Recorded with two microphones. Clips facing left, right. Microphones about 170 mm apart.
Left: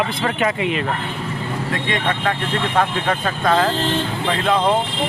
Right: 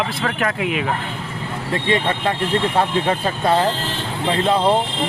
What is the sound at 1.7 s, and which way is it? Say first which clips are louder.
Speech: right 4 dB; 30° right (ahead or behind).